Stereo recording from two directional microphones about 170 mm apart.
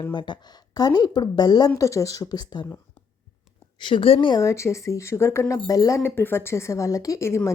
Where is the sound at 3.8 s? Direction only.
30° left (ahead or behind).